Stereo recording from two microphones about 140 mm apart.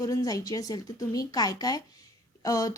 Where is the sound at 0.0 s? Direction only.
25° left (ahead or behind).